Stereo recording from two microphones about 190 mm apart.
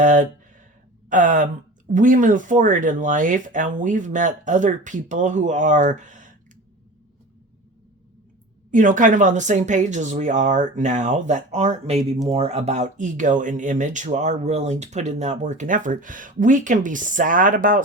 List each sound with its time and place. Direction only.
0.0 s speech: 40° right (ahead or behind)
8.7 s speech: 45° right (ahead or behind)